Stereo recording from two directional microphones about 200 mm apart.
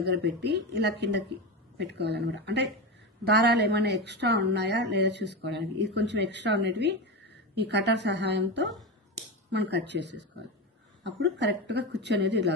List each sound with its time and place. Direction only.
0.2 s speech: 55° right (ahead or behind)